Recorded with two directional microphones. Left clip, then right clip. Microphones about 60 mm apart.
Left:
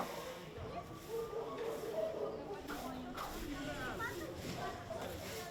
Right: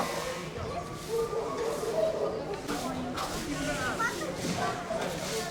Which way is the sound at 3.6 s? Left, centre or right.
Right.